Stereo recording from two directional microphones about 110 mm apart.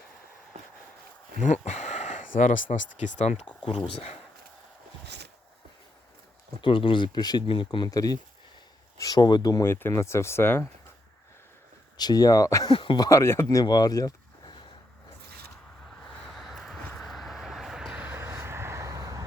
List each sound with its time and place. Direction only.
1.6 s speech: 90° left
3.7 s speech: 60° left (ahead or behind)
6.6 s speech: 50° left (ahead or behind)
7.4 s speech: 50° left (ahead or behind)
7.9 s speech: 35° left (ahead or behind)
9.6 s speech: 20° left (ahead or behind)
11.9 s speech: 35° left (ahead or behind)
12.7 s speech: 50° left (ahead or behind)
13.0 s speech: 30° left (ahead or behind)
16.3 s a sound: centre (ahead or behind)
16.9 s vehicle: 5° left (ahead or behind)
18.1 s vehicle: 25° right (ahead or behind)